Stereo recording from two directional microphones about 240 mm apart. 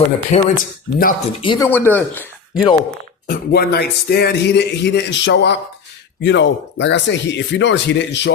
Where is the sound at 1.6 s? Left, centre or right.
Centre.